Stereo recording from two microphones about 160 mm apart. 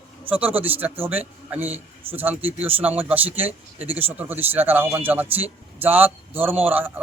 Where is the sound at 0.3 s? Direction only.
10° right (ahead or behind).